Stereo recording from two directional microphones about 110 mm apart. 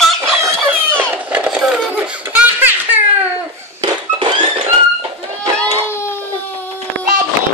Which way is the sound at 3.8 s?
45° right (ahead or behind).